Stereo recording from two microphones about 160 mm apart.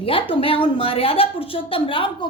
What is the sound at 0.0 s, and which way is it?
A woman's voice, 35° left (ahead or behind).